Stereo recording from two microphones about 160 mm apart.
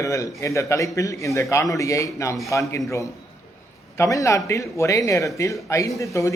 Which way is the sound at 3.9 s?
20° left (ahead or behind).